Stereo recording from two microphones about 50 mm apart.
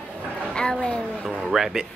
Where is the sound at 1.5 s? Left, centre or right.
Centre.